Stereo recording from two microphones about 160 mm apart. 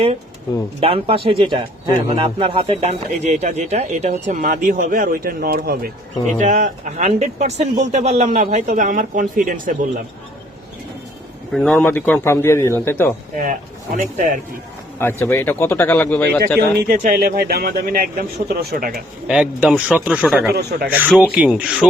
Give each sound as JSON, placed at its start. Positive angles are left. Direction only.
{"t": 0.8, "sound": "speech", "side_deg": -35}
{"t": 6.4, "sound": "speech", "side_deg": -50}
{"t": 11.5, "sound": "a man's voice", "side_deg": 5}
{"t": 13.3, "sound": "speech", "side_deg": -50}
{"t": 14.9, "sound": "a man's voice", "side_deg": 15}
{"t": 16.6, "sound": "speech", "side_deg": -70}
{"t": 19.3, "sound": "speech", "side_deg": -5}
{"t": 20.5, "sound": "speech", "side_deg": -85}
{"t": 20.8, "sound": "speech", "side_deg": -10}